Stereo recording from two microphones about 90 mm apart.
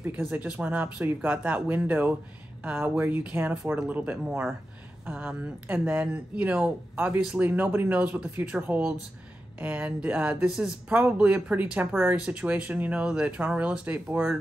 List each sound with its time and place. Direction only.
0.0 s speech: 20° right (ahead or behind)